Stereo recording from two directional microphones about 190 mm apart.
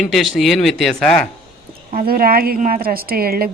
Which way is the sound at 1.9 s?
50° right (ahead or behind).